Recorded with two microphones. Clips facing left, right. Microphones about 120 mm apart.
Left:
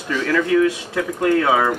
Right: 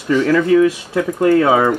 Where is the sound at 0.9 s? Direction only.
30° right (ahead or behind).